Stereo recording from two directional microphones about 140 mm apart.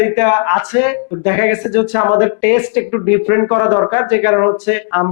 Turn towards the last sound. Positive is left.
turn(degrees=15)  # may be behind; listen again after turning